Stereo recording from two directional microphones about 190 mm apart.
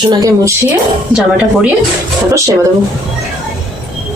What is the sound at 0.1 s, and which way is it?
Speech, 20° right (ahead or behind).